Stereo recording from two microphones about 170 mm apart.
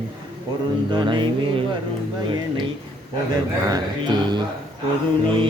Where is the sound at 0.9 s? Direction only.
30° right (ahead or behind).